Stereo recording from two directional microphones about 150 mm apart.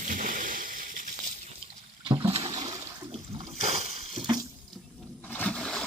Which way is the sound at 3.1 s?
35° right (ahead or behind).